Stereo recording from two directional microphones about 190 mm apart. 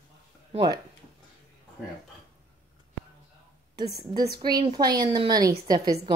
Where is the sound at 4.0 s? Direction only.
20° right (ahead or behind).